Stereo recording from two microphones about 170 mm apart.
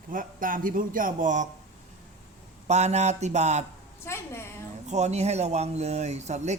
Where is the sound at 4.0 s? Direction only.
15° left (ahead or behind).